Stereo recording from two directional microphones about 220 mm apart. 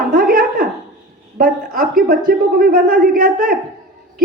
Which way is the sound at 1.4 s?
40° right (ahead or behind).